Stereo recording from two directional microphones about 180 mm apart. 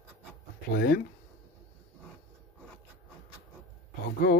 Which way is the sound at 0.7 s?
55° left (ahead or behind).